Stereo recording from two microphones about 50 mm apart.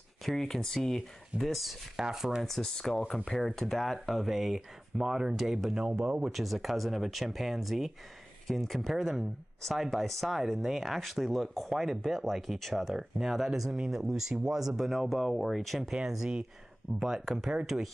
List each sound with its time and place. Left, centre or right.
0.2 s speech: centre
2.0 s speech: centre
2.4 s speech: centre
6.2 s speech: centre
15.9 s speech: centre